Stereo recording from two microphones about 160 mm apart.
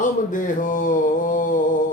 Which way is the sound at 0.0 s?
55° left (ahead or behind).